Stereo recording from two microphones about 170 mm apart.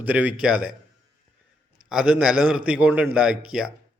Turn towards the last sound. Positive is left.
turn(degrees=-5)  # may be behind; listen again after turning